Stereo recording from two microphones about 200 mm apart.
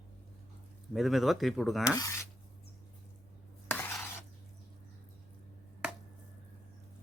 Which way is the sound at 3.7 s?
10° left (ahead or behind).